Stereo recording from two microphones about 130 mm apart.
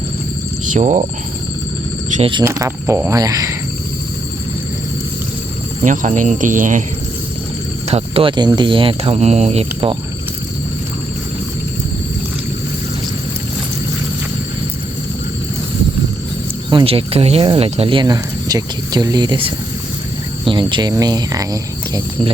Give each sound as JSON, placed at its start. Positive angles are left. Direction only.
{"t": 0.7, "sound": "speech", "side_deg": -75}
{"t": 2.4, "sound": "speech", "side_deg": -20}
{"t": 5.8, "sound": "speech", "side_deg": -75}
{"t": 7.9, "sound": "speech", "side_deg": -50}
{"t": 16.6, "sound": "speech", "side_deg": -40}